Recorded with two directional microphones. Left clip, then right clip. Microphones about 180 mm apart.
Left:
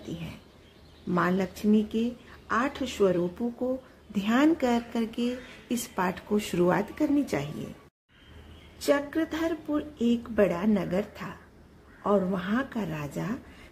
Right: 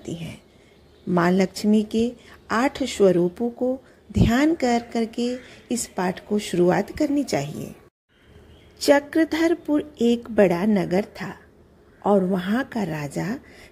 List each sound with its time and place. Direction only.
0.0 s a woman's voice: 20° right (ahead or behind)
8.7 s speech: 30° right (ahead or behind)